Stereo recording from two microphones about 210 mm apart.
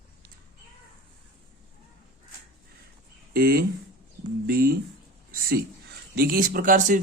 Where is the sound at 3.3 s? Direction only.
45° right (ahead or behind).